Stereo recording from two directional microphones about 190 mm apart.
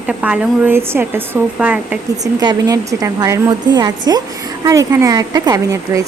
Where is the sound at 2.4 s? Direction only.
20° right (ahead or behind).